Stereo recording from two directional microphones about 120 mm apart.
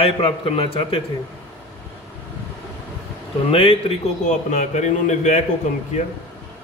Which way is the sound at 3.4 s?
50° left (ahead or behind).